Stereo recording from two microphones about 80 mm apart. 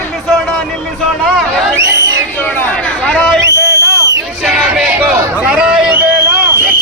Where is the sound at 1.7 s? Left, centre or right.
Right.